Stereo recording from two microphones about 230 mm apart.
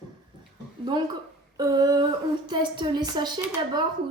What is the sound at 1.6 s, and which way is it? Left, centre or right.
A woman's voice, centre.